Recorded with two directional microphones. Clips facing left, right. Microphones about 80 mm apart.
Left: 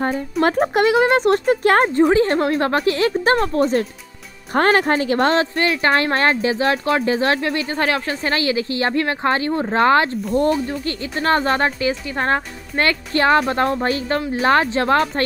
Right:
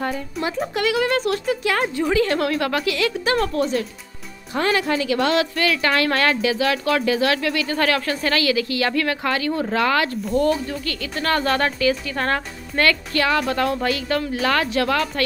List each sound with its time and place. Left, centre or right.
0.4 s speech: left